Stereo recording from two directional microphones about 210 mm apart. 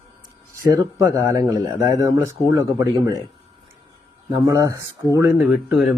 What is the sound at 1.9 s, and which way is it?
Speech, 15° right (ahead or behind).